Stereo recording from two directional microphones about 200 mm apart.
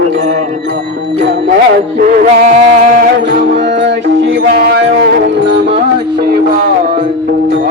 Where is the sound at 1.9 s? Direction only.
45° right (ahead or behind).